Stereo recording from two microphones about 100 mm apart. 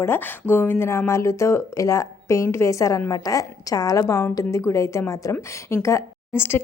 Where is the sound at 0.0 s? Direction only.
25° left (ahead or behind).